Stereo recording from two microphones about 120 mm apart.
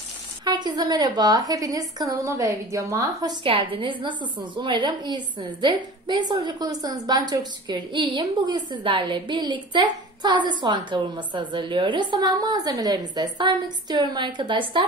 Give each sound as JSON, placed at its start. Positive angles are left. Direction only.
{"t": 0.5, "sound": "a woman's voice", "side_deg": -35}
{"t": 3.7, "sound": "a woman's voice", "side_deg": -45}